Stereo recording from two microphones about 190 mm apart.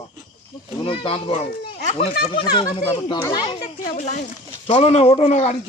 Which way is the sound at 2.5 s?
25° left (ahead or behind).